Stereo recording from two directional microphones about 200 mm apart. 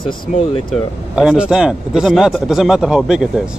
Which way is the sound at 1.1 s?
5° right (ahead or behind).